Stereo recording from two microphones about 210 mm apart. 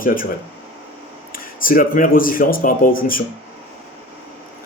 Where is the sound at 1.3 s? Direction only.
40° left (ahead or behind).